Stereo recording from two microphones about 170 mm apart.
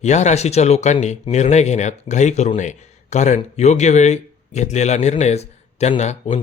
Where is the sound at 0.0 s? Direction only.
45° left (ahead or behind).